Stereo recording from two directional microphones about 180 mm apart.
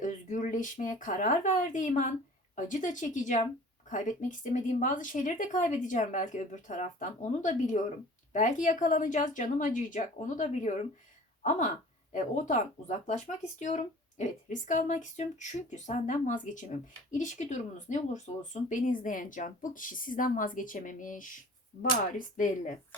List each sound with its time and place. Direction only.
0.0 s speech: 40° left (ahead or behind)
12.1 s speech: 45° left (ahead or behind)
22.4 s speech: 45° left (ahead or behind)